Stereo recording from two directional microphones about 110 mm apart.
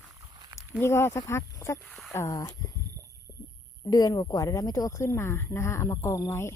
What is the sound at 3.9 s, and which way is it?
Speech, 35° left (ahead or behind).